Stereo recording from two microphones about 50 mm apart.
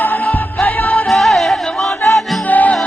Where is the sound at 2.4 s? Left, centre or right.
Left.